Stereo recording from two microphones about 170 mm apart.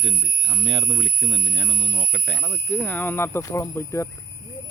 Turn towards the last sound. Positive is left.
turn(degrees=15)  # may be behind; listen again after turning